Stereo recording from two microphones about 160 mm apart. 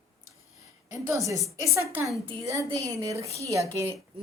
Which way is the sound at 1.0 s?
20° right (ahead or behind).